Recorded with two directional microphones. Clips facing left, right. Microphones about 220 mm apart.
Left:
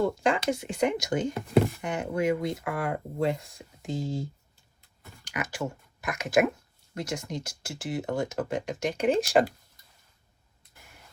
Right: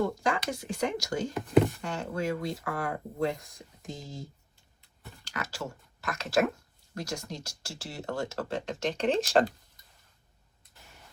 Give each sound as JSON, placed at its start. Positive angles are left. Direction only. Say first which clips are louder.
{"t": 0.2, "sound": "speech", "louder": "left 5 dB", "side_deg": 25}
{"t": 5.2, "sound": "speech", "louder": "left 5 dB", "side_deg": 15}